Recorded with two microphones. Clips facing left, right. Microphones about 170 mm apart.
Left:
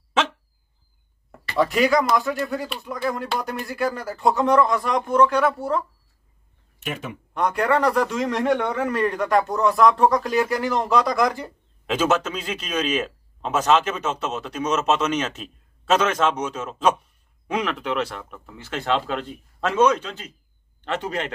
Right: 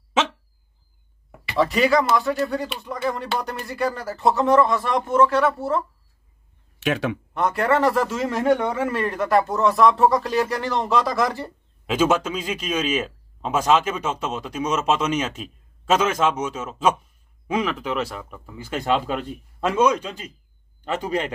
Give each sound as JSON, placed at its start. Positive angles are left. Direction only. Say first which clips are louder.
{"t": 1.3, "sound": "speech", "louder": "even", "side_deg": -5}
{"t": 6.8, "sound": "speech", "louder": "right 8 dB", "side_deg": -90}
{"t": 7.3, "sound": "a man's voice", "louder": "even", "side_deg": 0}